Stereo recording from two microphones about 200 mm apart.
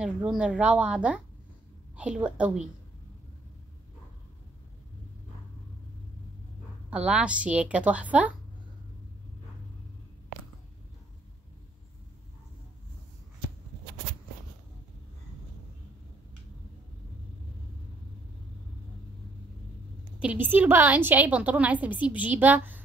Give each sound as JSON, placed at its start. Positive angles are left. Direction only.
{"t": 0.0, "sound": "a woman's voice", "side_deg": -5}
{"t": 6.9, "sound": "a woman's voice", "side_deg": -5}
{"t": 20.2, "sound": "a woman's voice", "side_deg": -10}